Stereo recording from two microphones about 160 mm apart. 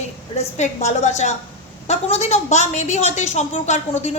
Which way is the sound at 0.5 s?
45° left (ahead or behind).